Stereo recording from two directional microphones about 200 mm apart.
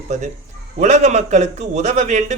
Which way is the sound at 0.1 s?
35° right (ahead or behind).